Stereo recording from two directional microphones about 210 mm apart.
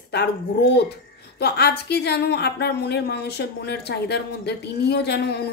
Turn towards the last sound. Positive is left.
turn(degrees=50)  # may be behind; listen again after turning